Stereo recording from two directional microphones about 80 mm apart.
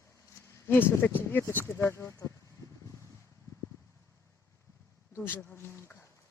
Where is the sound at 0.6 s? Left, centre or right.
Left.